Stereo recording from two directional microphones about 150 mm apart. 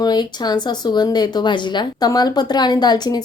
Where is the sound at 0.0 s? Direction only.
30° left (ahead or behind).